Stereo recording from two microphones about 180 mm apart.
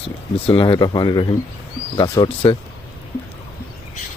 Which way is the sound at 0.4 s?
25° left (ahead or behind).